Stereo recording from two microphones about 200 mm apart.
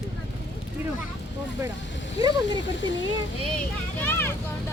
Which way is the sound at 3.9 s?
10° left (ahead or behind).